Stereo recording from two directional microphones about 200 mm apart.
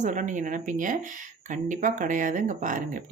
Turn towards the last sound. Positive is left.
turn(degrees=-40)  # may be behind; listen again after turning